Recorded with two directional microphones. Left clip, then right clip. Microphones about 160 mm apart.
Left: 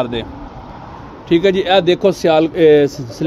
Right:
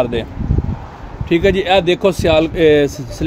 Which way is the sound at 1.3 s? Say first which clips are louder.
Even; 20° right (ahead or behind).